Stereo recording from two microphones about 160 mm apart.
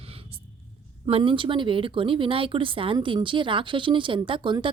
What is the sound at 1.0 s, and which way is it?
Speech, 35° right (ahead or behind).